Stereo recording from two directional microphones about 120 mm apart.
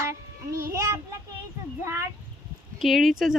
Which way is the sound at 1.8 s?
20° right (ahead or behind).